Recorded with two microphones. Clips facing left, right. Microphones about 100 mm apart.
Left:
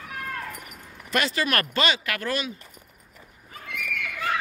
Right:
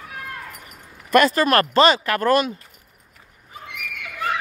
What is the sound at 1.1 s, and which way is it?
Speech, 45° right (ahead or behind).